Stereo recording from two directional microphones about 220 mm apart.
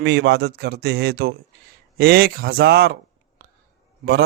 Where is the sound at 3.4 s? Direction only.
40° right (ahead or behind).